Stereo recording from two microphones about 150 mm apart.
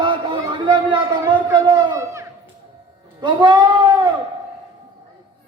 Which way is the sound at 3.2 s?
30° right (ahead or behind).